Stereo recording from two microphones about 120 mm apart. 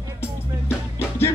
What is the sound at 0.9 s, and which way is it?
Music, 20° left (ahead or behind).